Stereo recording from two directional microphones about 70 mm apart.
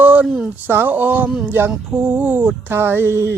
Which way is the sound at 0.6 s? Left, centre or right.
Right.